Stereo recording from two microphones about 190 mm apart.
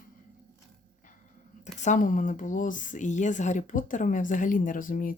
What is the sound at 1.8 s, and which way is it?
Speech, 40° left (ahead or behind).